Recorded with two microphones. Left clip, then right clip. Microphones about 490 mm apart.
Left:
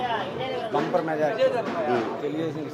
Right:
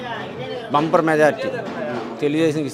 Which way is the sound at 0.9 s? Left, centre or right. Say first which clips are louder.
Right 11 dB; right.